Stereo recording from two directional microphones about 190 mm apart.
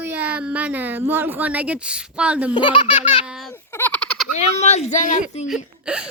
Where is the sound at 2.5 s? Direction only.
25° left (ahead or behind).